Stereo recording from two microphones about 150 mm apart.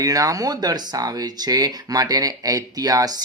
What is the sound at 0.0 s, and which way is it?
Speech, 25° right (ahead or behind).